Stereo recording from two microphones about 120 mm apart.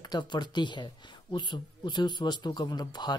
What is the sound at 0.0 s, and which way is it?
Speech, 35° left (ahead or behind).